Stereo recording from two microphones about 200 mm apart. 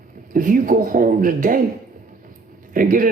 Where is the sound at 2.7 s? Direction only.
45° right (ahead or behind).